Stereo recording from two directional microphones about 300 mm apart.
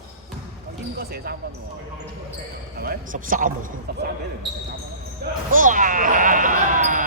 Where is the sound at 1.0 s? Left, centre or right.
Right.